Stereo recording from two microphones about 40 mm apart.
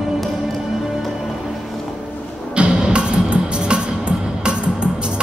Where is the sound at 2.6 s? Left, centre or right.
Right.